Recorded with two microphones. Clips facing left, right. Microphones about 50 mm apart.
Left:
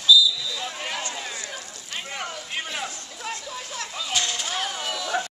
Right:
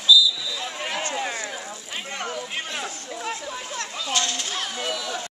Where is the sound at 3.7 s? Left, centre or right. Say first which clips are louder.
Right 1 dB; centre.